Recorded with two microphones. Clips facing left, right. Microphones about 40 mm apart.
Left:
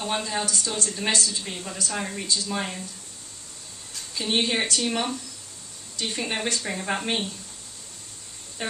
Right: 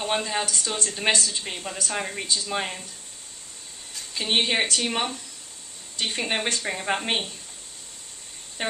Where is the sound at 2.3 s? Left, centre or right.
Right.